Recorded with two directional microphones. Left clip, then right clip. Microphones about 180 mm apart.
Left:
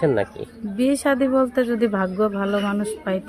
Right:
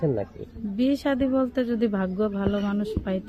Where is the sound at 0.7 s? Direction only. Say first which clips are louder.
Left 5 dB; 20° left (ahead or behind).